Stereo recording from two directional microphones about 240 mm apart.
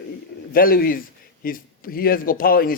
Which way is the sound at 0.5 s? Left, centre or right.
Left.